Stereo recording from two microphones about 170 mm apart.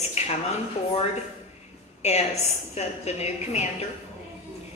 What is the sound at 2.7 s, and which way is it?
Speech, 40° left (ahead or behind).